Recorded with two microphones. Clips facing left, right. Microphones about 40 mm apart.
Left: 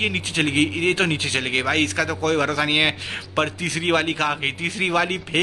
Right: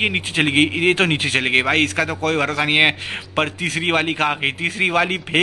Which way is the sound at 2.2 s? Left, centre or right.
Centre.